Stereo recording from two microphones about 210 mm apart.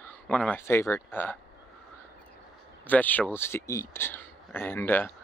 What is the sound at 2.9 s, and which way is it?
Speech, 10° left (ahead or behind).